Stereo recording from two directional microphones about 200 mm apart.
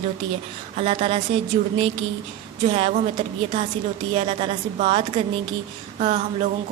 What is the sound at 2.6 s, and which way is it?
A woman's voice, 30° right (ahead or behind).